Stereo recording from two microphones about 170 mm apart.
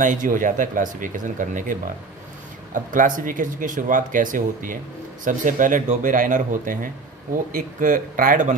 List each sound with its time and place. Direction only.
0.0 s speech: 50° right (ahead or behind)